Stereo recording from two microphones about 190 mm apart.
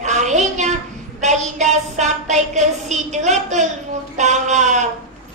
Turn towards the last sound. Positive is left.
turn(degrees=-40)  # may be behind; listen again after turning